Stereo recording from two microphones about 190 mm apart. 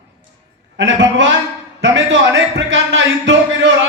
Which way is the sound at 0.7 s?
80° right.